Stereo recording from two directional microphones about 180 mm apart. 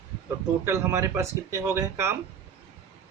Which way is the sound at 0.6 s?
15° right (ahead or behind).